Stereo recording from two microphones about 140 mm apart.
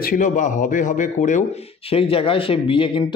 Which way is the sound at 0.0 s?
80° left.